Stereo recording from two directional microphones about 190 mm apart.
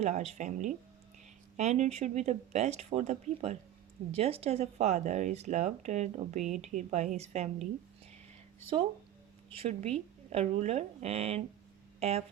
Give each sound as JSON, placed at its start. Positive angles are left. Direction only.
{"t": 0.0, "sound": "speech", "side_deg": -35}
{"t": 9.6, "sound": "speech", "side_deg": -30}